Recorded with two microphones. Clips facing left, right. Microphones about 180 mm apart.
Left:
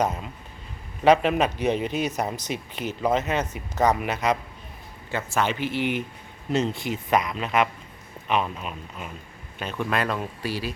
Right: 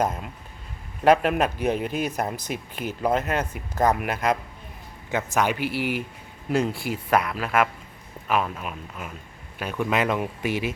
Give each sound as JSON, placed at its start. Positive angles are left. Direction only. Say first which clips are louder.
{"t": 1.0, "sound": "speech", "louder": "even", "side_deg": -5}